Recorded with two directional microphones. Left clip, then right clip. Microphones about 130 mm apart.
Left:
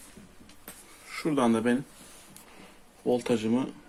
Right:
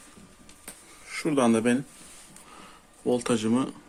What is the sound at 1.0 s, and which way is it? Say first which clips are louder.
Speech: right 2 dB; 20° right (ahead or behind).